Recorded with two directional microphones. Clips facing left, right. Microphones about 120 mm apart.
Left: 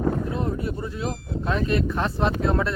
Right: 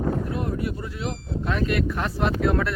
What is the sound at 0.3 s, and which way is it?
Speech, 30° left (ahead or behind).